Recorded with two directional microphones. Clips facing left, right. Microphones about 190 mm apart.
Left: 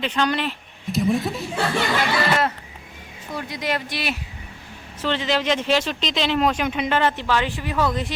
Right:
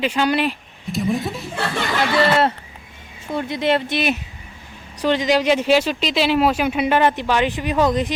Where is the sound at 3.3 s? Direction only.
25° right (ahead or behind).